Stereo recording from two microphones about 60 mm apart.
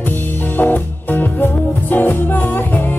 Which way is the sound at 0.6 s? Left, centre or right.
Left.